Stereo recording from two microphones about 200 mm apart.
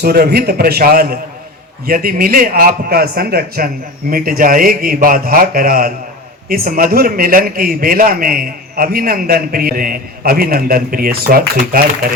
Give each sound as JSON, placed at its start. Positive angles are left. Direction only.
{"t": 0.0, "sound": "a man's voice", "side_deg": -50}